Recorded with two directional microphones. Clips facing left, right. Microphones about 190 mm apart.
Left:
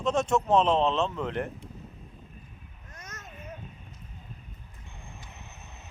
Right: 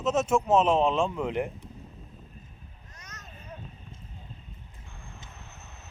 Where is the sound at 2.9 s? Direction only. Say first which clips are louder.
Left 5 dB; 50° left (ahead or behind).